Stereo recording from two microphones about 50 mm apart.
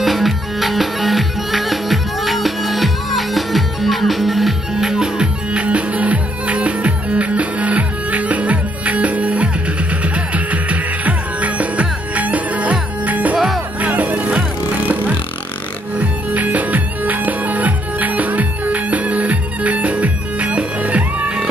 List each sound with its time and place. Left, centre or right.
0.0 s music: centre; by 14.4 s right
16.0 s music: right